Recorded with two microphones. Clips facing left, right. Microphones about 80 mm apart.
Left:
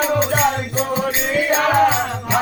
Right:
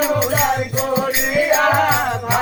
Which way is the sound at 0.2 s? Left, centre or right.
Centre.